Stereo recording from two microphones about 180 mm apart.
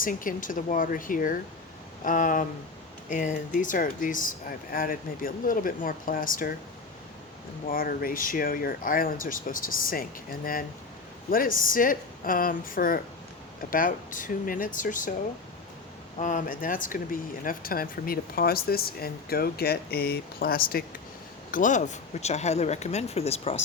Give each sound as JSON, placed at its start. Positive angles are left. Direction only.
{"t": 0.0, "sound": "speech", "side_deg": 50}
{"t": 7.7, "sound": "speech", "side_deg": 55}
{"t": 16.1, "sound": "speech", "side_deg": 45}